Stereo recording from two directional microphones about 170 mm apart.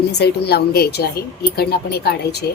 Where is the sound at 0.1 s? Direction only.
75° left (ahead or behind).